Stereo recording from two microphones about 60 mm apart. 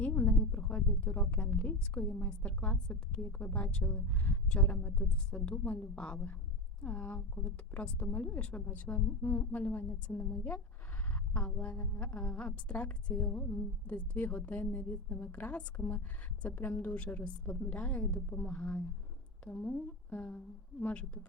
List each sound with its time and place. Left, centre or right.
0.0 s a sound: left
0.7 s a woman's voice: left
19.5 s a woman's voice: centre